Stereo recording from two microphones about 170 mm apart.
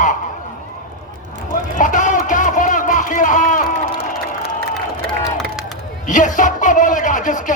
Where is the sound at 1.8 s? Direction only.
50° left (ahead or behind).